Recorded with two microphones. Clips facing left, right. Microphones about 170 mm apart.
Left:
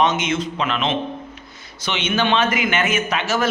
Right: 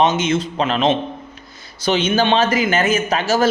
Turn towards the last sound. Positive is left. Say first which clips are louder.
# right 4 dB
turn(degrees=-35)  # may be behind; listen again after turning